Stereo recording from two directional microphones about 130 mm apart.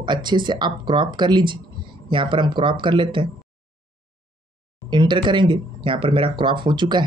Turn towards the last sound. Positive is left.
turn(degrees=-35)  # may be behind; listen again after turning